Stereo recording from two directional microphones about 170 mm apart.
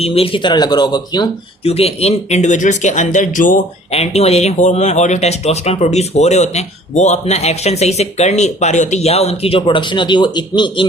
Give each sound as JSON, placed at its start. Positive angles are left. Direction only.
{"t": 0.0, "sound": "speech", "side_deg": 35}
{"t": 1.6, "sound": "speech", "side_deg": 35}
{"t": 3.9, "sound": "speech", "side_deg": 40}